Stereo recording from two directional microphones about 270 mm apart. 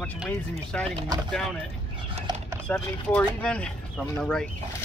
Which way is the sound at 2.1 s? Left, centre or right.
Right.